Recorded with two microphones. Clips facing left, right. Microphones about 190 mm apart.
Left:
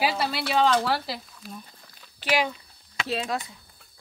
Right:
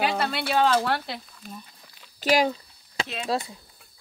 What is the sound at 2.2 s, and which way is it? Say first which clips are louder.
Speech: right 4 dB; 40° right (ahead or behind).